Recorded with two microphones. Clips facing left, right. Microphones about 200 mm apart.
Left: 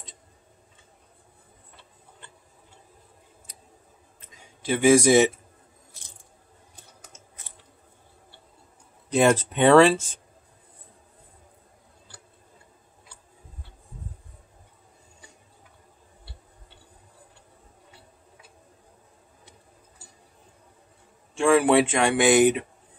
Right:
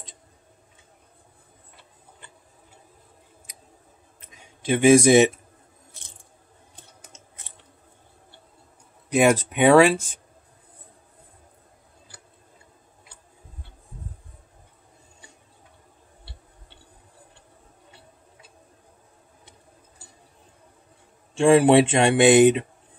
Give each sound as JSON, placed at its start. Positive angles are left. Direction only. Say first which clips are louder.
{"t": 4.6, "sound": "speech", "louder": "right 3 dB", "side_deg": -20}
{"t": 7.5, "sound": "a sound", "louder": "right 1 dB", "side_deg": -25}
{"t": 9.1, "sound": "speech", "louder": "right 1 dB", "side_deg": -10}
{"t": 21.4, "sound": "speech", "louder": "right 4 dB", "side_deg": -30}